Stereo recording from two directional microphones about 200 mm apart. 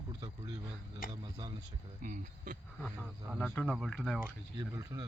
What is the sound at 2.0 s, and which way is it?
Speech, 40° right (ahead or behind).